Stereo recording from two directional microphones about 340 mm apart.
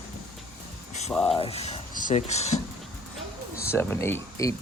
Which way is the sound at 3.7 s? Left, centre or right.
Centre.